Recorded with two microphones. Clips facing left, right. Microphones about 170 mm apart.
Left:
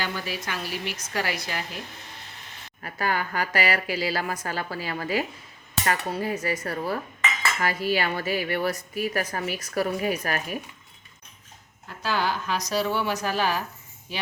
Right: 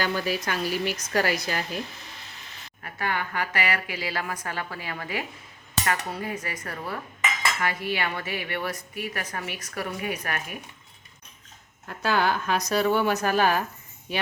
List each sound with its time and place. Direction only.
0.0 s a woman's voice: 45° right (ahead or behind)
2.8 s a woman's voice: 35° left (ahead or behind)
11.9 s a woman's voice: 55° right (ahead or behind)